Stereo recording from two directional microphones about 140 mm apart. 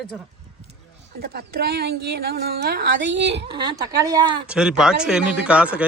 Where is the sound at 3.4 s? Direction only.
35° right (ahead or behind).